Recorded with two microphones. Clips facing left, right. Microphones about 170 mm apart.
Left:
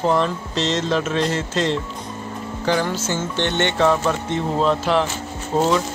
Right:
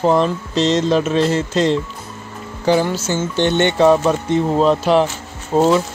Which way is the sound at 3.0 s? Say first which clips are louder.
Right 5 dB; 15° right (ahead or behind).